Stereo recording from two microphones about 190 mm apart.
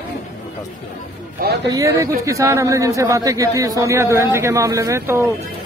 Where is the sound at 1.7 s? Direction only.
15° right (ahead or behind).